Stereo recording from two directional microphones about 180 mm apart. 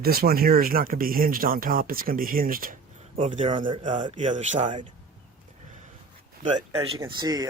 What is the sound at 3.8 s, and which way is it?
Speech, 40° right (ahead or behind).